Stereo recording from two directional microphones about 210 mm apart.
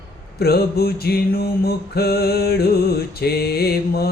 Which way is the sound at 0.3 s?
50° left (ahead or behind).